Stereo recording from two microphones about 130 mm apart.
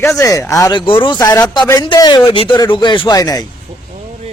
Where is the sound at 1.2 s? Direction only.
30° left (ahead or behind).